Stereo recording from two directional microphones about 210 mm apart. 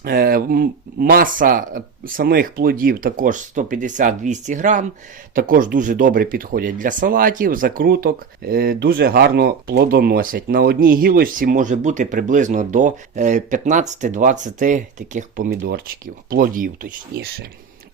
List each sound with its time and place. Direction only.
0.0 s speech: 45° right (ahead or behind)